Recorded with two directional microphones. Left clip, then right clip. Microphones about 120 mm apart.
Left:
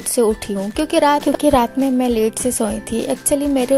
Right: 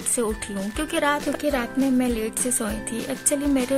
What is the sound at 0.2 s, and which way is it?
Speech, 45° left (ahead or behind).